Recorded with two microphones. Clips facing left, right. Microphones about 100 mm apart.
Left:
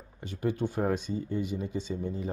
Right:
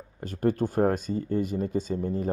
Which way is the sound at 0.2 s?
45° right (ahead or behind).